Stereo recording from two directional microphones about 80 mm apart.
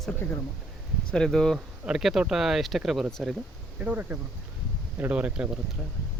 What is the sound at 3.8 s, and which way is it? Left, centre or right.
Speech, right.